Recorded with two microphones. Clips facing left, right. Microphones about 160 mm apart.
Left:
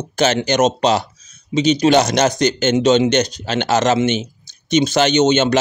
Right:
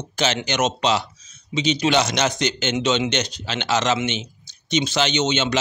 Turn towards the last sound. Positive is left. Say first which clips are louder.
# left 8 dB
turn(degrees=45)  # may be behind; listen again after turning